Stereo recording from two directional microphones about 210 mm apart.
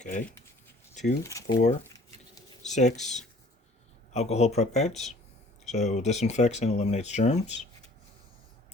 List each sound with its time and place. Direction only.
1.2 s speech: 15° left (ahead or behind)
2.6 s speech: 35° left (ahead or behind)